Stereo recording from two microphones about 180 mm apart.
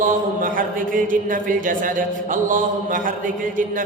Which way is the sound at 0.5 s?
50° right (ahead or behind).